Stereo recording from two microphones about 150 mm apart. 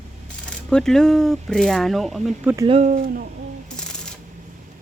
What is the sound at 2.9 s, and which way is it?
Speech, 75° right (ahead or behind).